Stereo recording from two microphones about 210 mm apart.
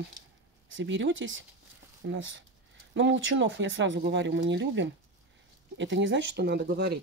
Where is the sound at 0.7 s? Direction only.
60° right (ahead or behind).